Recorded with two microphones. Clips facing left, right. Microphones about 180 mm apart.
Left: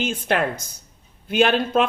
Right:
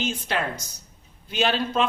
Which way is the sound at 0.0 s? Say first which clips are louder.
Left 5 dB; 55° left (ahead or behind).